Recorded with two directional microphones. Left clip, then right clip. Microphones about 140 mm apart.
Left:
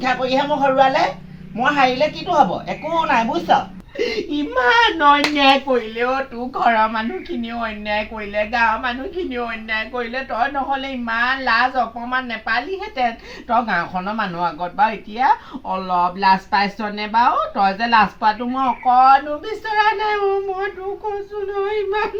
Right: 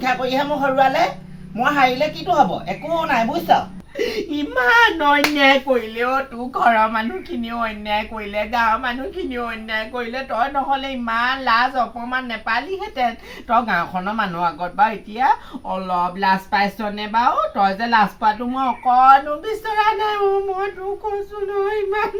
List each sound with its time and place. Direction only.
0.0 s a woman's voice: 15° right (ahead or behind)